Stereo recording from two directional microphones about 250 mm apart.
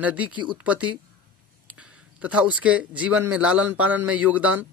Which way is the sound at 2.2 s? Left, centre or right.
Centre.